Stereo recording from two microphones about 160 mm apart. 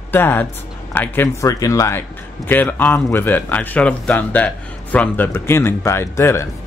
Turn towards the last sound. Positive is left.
turn(degrees=15)  # may be behind; listen again after turning